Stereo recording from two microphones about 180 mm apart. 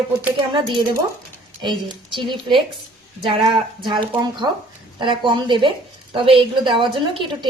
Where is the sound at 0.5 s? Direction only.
25° right (ahead or behind).